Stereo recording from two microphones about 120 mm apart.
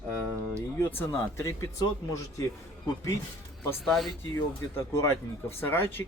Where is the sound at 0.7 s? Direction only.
20° left (ahead or behind).